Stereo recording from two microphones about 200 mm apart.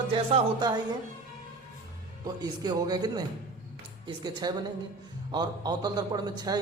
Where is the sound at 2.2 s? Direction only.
20° right (ahead or behind).